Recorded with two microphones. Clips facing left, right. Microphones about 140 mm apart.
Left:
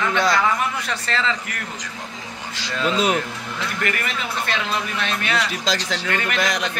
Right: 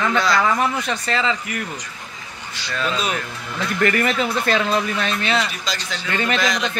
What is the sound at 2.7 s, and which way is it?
Speech, 20° left (ahead or behind).